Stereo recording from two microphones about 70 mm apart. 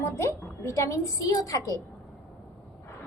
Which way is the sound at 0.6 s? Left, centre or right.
Left.